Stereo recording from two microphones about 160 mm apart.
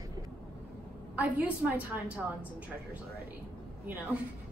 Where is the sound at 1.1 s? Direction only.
10° right (ahead or behind).